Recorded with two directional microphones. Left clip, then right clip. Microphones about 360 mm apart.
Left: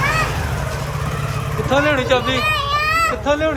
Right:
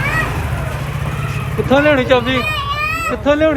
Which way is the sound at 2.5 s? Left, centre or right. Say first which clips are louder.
Left 1 dB; centre.